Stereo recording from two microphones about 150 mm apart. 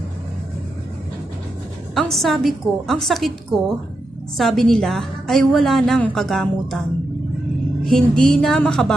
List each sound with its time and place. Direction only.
2.0 s a woman's voice: centre (ahead or behind)
7.9 s a woman's voice: 5° left (ahead or behind)